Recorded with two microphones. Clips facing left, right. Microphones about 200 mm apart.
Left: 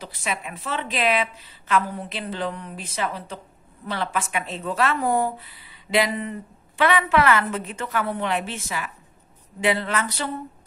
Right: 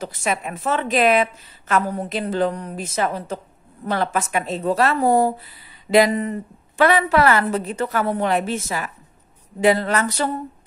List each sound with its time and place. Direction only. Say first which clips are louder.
0.0 s a woman's voice: right 6 dB; 45° right (ahead or behind)